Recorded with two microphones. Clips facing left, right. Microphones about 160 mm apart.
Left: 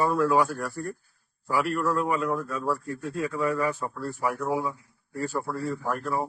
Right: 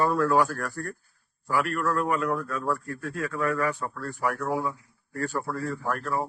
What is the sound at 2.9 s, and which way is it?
A man's voice, 20° left (ahead or behind).